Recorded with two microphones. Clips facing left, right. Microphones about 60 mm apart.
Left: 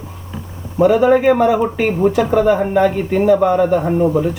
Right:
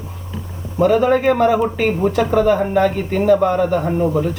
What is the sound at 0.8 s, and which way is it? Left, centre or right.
Speech, centre.